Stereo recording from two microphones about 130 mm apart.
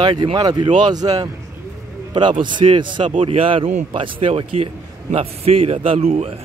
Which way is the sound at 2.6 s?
50° right (ahead or behind).